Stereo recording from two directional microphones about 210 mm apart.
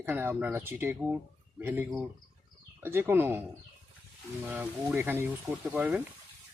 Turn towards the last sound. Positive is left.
turn(degrees=-10)  # may be behind; listen again after turning